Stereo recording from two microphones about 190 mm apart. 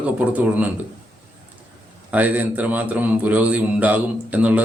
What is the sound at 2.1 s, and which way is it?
Speech, 10° right (ahead or behind).